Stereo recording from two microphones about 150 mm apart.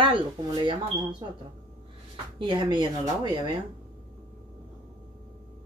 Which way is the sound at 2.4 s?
30° right (ahead or behind).